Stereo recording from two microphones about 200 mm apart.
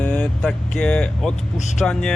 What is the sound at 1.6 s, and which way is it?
Speech, 35° left (ahead or behind).